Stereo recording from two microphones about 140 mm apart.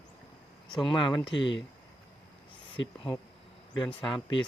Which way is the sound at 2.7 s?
35° left (ahead or behind).